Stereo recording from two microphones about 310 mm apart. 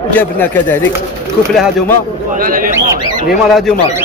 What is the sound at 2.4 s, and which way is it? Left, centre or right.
Speech, right.